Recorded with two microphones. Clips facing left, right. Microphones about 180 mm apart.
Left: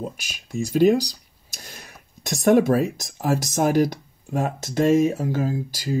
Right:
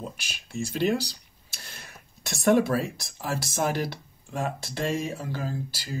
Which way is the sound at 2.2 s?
45° left (ahead or behind).